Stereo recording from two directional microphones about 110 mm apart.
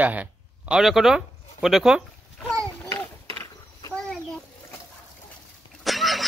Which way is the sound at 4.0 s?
5° left (ahead or behind).